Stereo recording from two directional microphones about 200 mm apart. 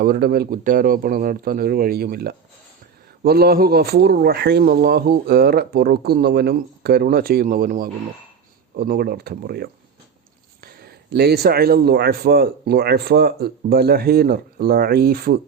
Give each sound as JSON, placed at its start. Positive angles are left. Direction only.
{"t": 0.0, "sound": "speech", "side_deg": -50}